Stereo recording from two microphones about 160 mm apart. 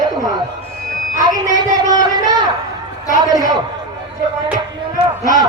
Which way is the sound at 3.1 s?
20° right (ahead or behind).